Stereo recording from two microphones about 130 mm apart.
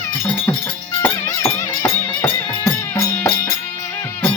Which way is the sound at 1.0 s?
20° left (ahead or behind).